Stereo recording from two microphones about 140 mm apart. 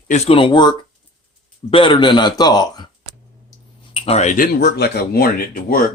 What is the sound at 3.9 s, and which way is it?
Speech, 45° left (ahead or behind).